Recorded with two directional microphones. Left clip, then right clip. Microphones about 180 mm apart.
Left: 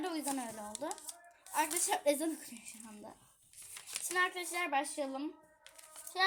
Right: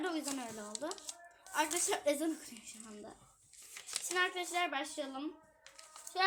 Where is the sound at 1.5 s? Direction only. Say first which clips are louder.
Left 1 dB; 50° left (ahead or behind).